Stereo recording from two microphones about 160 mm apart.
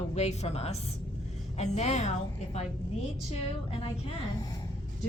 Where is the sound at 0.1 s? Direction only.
40° left (ahead or behind).